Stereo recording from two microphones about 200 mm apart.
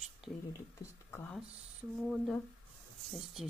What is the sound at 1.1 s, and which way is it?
Speech, 10° left (ahead or behind).